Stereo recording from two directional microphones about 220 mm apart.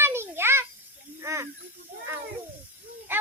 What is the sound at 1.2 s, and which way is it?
Speech, 15° right (ahead or behind).